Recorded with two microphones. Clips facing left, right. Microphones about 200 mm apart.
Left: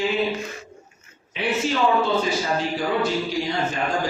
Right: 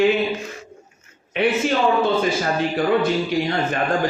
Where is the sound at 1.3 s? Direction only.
60° right (ahead or behind).